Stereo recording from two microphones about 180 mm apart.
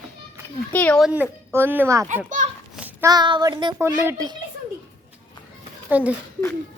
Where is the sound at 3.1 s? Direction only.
25° right (ahead or behind).